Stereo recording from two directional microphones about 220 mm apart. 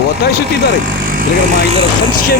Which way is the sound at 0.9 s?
40° right (ahead or behind).